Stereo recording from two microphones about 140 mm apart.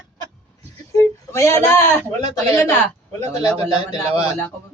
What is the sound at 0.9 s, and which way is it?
Speech, 20° left (ahead or behind).